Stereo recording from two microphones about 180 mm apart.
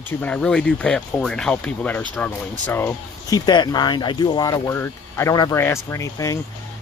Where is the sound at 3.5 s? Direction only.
25° left (ahead or behind).